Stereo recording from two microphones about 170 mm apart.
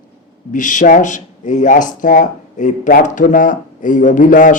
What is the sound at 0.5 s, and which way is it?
Speech, 50° left (ahead or behind).